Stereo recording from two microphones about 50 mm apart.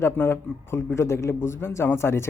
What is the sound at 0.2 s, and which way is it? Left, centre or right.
Speech, left.